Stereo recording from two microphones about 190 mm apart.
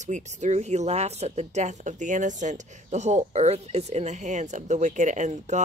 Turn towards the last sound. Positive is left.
turn(degrees=-40)  # may be behind; listen again after turning